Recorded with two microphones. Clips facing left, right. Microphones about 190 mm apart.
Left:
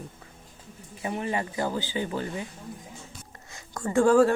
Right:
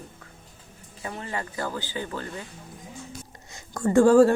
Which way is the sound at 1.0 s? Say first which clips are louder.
Left 4 dB; 20° left (ahead or behind).